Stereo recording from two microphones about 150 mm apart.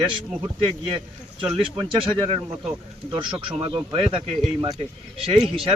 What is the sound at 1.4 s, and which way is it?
Speech, 35° right (ahead or behind).